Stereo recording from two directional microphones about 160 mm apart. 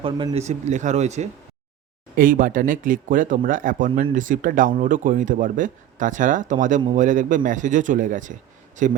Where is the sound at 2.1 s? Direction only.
60° right (ahead or behind).